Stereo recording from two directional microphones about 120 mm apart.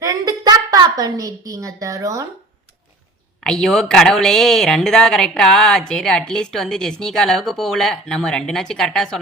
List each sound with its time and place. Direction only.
0.0 s a woman's voice: 30° right (ahead or behind)
3.4 s speech: 5° left (ahead or behind)